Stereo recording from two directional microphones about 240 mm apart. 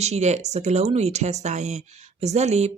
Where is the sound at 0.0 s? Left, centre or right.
Right.